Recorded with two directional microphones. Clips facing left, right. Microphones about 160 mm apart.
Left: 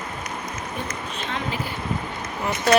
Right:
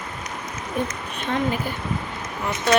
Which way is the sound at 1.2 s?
50° right (ahead or behind).